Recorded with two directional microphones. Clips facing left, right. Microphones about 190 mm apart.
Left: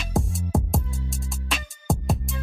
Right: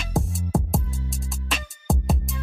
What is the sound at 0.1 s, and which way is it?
Music, centre (ahead or behind).